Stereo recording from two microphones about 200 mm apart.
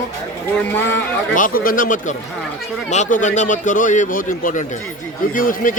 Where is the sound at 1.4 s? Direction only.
45° left (ahead or behind).